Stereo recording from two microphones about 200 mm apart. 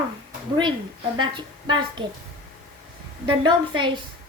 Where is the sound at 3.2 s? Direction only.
25° right (ahead or behind).